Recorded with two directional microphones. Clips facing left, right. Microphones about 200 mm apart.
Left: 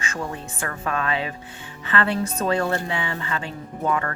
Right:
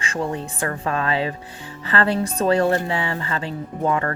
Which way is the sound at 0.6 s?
30° right (ahead or behind).